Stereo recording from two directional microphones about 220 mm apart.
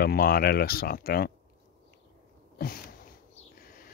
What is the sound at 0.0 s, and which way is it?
Speech, 45° left (ahead or behind).